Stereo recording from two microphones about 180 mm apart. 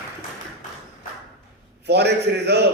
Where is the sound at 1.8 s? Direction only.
65° right (ahead or behind).